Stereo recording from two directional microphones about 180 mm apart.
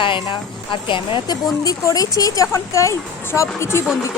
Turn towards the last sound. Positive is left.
turn(degrees=15)  # may be behind; listen again after turning